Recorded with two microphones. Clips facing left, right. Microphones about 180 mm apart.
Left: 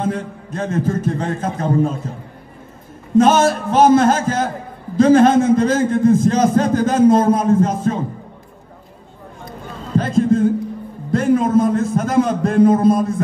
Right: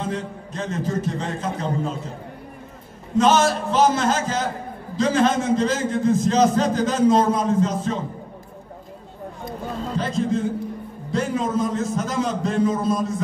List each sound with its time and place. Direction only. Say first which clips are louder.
0.0 s a man's voice: left 5 dB; 50° left (ahead or behind)
3.2 s a man's voice: left 5 dB; 50° left (ahead or behind)
9.9 s a man's voice: left 8 dB; 50° left (ahead or behind)